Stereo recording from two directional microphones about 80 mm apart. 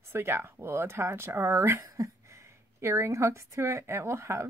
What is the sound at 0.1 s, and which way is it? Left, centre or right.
A woman's voice, right.